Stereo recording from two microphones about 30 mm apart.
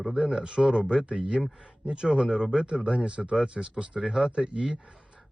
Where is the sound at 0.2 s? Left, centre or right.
Right.